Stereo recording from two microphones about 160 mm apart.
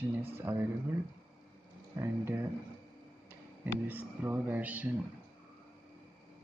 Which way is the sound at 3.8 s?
10° right (ahead or behind).